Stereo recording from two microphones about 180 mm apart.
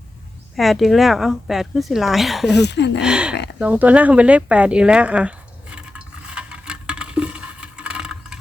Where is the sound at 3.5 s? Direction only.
10° right (ahead or behind).